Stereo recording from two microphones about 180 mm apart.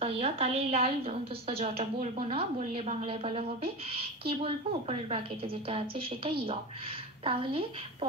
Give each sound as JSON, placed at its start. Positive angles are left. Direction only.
{"t": 0.0, "sound": "a woman's voice", "side_deg": -35}